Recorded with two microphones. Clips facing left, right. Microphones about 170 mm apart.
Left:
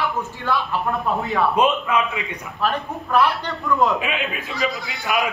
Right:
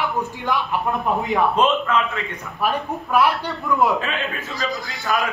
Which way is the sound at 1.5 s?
10° left (ahead or behind).